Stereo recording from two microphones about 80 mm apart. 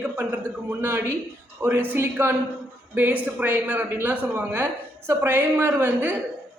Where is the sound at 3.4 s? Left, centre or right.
Right.